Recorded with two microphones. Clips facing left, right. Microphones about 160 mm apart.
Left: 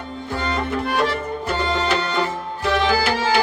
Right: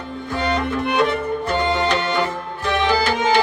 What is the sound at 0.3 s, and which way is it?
Music, 20° right (ahead or behind).